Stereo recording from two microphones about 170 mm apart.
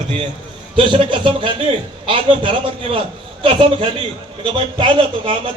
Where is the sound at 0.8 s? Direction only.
30° right (ahead or behind).